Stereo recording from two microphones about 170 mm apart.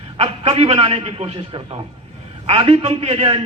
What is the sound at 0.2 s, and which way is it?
A man's voice, 35° right (ahead or behind).